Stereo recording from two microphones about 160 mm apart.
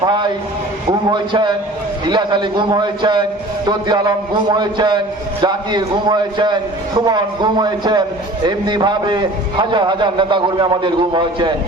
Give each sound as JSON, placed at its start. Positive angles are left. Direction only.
{"t": 0.0, "sound": "a man's voice", "side_deg": -25}